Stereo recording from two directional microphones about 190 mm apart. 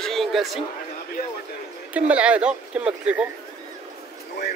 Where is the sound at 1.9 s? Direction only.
5° right (ahead or behind).